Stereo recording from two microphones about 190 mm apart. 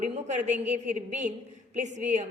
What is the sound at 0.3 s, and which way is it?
A woman's voice, 40° right (ahead or behind).